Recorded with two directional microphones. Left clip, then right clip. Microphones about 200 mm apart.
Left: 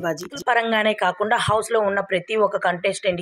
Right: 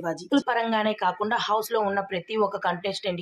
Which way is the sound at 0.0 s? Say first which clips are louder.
Left 1 dB; 20° left (ahead or behind).